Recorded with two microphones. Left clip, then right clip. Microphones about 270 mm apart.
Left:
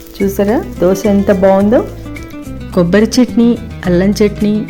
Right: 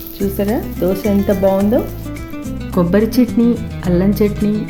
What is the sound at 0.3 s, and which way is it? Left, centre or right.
Speech, left.